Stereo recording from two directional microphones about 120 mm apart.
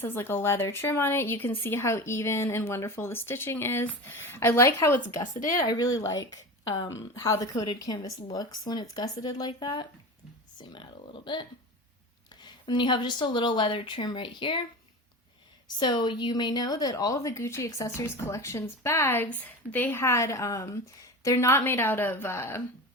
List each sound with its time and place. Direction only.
0.0 s a woman's voice: 20° left (ahead or behind)
5.3 s speech: 90° left
5.5 s a woman's voice: 30° left (ahead or behind)
15.8 s a woman's voice: 40° left (ahead or behind); by 22.6 s 20° left (ahead or behind)